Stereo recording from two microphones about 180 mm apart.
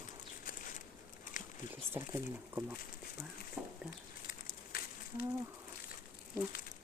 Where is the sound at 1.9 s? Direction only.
15° right (ahead or behind).